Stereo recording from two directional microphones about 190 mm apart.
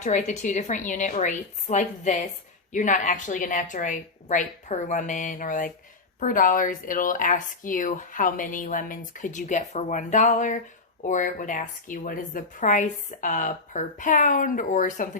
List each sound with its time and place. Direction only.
0.0 s a woman's voice: 40° left (ahead or behind)